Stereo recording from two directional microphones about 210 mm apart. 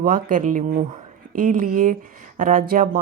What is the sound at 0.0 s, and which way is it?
A woman's voice, 40° right (ahead or behind).